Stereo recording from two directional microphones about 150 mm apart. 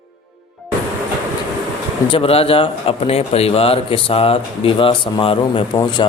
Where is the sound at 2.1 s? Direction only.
40° left (ahead or behind).